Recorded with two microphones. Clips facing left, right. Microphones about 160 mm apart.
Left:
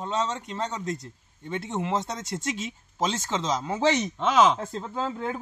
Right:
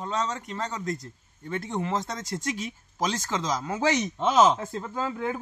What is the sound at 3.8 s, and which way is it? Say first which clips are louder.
Speech: left 1 dB; 10° right (ahead or behind).